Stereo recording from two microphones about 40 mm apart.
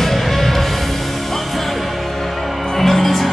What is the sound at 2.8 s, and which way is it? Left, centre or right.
Music, centre.